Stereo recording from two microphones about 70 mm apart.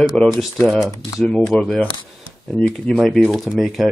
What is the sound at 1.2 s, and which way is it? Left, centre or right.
Speech, centre.